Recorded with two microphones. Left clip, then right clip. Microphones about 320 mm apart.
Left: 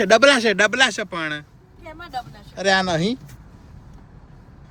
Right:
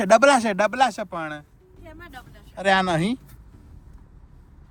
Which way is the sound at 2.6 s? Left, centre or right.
Right.